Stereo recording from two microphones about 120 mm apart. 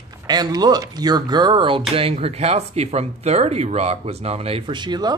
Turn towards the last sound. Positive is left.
turn(degrees=-35)  # may be behind; listen again after turning